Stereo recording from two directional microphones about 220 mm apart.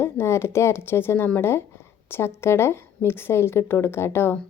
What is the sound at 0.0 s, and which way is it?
A woman's voice, 10° left (ahead or behind).